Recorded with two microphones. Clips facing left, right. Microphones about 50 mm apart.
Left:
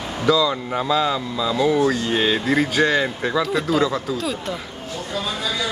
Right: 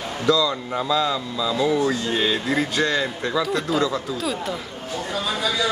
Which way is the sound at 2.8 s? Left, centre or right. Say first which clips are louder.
Left 3 dB; centre.